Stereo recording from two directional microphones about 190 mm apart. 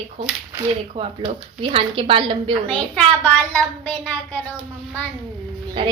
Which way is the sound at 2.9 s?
5° left (ahead or behind).